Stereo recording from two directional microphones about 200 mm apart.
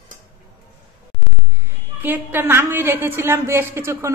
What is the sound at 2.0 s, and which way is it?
A woman's voice, 10° right (ahead or behind).